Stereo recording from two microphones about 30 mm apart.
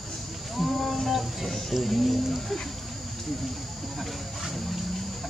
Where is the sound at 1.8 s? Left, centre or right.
Centre.